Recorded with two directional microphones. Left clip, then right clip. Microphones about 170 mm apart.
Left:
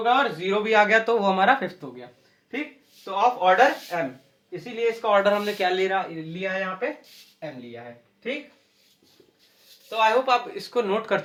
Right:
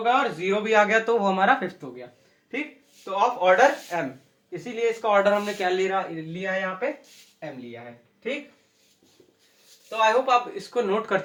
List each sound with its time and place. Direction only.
0.0 s speech: 15° left (ahead or behind)
4.5 s a man's voice: 10° right (ahead or behind)
5.0 s speech: 20° left (ahead or behind)
5.5 s speech: 30° left (ahead or behind)
9.9 s speech: 30° left (ahead or behind)